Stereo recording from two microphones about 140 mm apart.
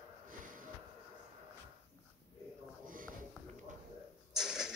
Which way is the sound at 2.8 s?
80° right.